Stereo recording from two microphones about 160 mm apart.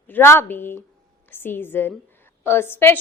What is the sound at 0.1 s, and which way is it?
A woman's voice, 15° left (ahead or behind).